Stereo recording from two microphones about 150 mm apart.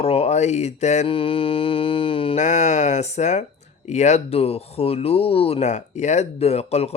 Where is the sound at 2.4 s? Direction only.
50° left (ahead or behind).